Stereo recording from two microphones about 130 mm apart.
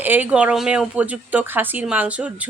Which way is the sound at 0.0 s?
15° right (ahead or behind).